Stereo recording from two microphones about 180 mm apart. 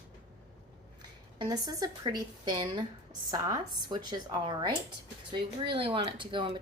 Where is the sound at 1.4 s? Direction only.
20° right (ahead or behind).